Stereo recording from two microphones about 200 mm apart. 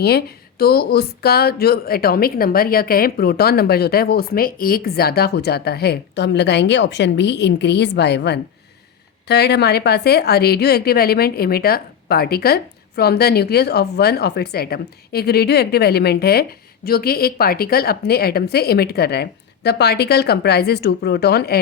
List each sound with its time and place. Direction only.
0.0 s a woman's voice: 50° left (ahead or behind)